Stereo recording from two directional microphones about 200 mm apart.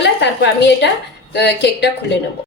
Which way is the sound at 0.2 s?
60° left (ahead or behind).